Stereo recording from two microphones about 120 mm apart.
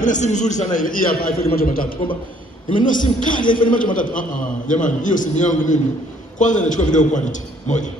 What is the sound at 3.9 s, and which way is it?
A man's voice, 90° left.